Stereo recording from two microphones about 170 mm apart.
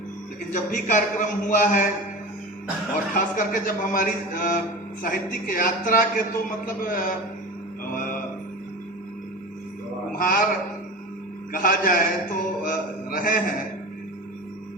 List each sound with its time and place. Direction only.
0.5 s a man's voice: 45° left (ahead or behind)
3.2 s a man's voice: 50° left (ahead or behind)
10.2 s a man's voice: 60° left (ahead or behind)
11.5 s a man's voice: 60° left (ahead or behind)